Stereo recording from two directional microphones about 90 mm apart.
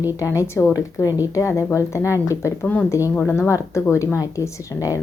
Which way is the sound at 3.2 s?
30° left (ahead or behind).